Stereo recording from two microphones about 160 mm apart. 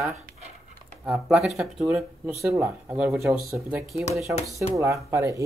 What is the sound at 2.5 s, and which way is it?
Speech, 20° right (ahead or behind).